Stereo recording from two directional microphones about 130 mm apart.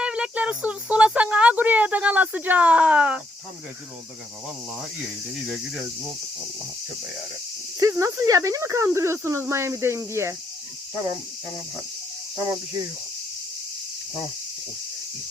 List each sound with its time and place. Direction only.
0.0 s speech: 10° right (ahead or behind)
7.8 s speech: 25° right (ahead or behind)